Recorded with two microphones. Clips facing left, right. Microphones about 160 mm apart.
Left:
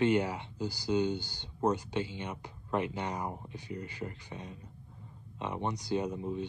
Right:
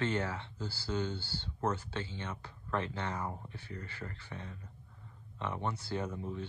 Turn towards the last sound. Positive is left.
turn(degrees=20)  # may be behind; listen again after turning